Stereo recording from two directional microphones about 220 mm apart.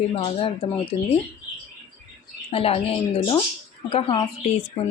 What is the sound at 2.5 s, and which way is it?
A woman's voice, 25° left (ahead or behind).